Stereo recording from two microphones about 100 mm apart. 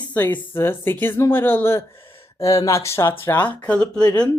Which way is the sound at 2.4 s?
35° left (ahead or behind).